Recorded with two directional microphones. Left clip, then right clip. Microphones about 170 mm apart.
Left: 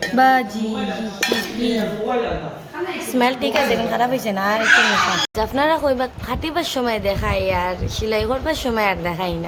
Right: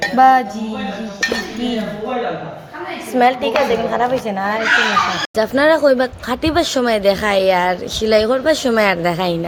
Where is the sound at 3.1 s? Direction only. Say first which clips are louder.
Right 5 dB; centre (ahead or behind).